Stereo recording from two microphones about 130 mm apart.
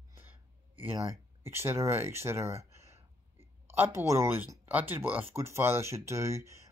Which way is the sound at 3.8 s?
20° right (ahead or behind).